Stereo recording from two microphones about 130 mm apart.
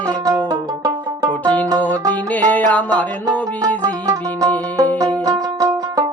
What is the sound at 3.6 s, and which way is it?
Music, 30° right (ahead or behind).